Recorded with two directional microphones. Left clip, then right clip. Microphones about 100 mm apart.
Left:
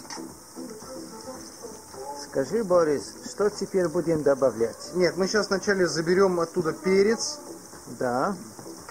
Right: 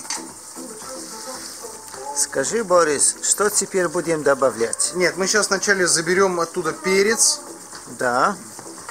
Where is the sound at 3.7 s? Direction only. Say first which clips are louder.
Right 4 dB; 40° right (ahead or behind).